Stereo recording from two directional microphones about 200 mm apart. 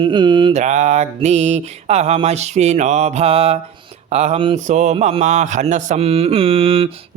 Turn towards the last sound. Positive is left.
turn(degrees=-30)  # may be behind; listen again after turning